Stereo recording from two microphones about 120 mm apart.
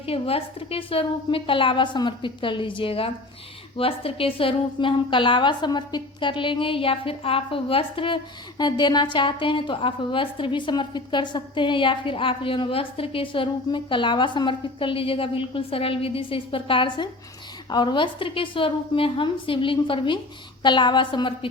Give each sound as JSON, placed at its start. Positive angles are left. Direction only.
{"t": 0.0, "sound": "a woman's voice", "side_deg": 50}